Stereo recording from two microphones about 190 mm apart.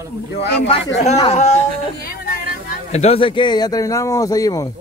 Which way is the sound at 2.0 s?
50° left (ahead or behind).